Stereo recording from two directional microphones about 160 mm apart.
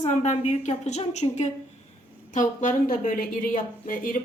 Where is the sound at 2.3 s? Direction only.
55° left (ahead or behind).